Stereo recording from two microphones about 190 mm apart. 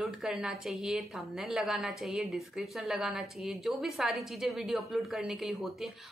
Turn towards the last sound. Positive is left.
turn(degrees=0)  # may be behind; listen again after turning